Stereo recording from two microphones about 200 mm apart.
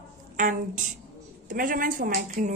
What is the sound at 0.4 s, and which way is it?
A woman's voice, 40° right (ahead or behind).